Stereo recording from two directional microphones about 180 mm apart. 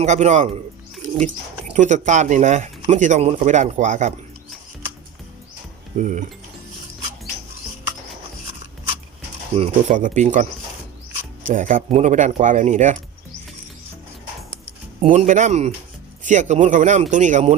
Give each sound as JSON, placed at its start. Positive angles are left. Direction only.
{"t": 0.0, "sound": "speech", "side_deg": -40}
{"t": 1.7, "sound": "speech", "side_deg": -40}
{"t": 6.0, "sound": "speech", "side_deg": -45}
{"t": 9.6, "sound": "speech", "side_deg": -40}
{"t": 11.4, "sound": "speech", "side_deg": -45}
{"t": 15.0, "sound": "speech", "side_deg": -45}